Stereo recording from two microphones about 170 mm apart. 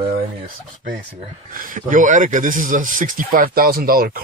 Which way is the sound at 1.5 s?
55° right (ahead or behind).